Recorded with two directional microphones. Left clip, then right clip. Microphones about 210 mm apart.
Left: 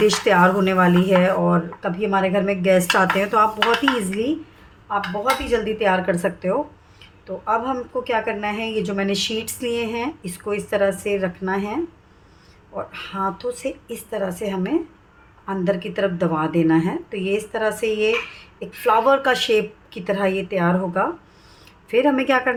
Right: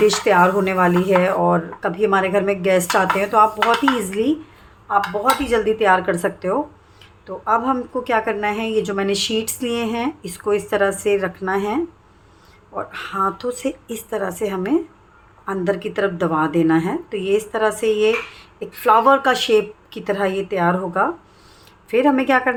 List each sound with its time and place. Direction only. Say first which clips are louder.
0.0 s a woman's voice: right 1 dB; 5° right (ahead or behind)
5.5 s a woman's voice: right 4 dB; 25° right (ahead or behind); by 22.5 s 10° right (ahead or behind)